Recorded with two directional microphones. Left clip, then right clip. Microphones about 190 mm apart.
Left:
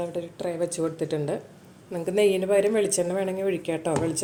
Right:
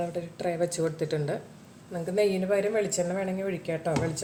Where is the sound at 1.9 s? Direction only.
35° left (ahead or behind).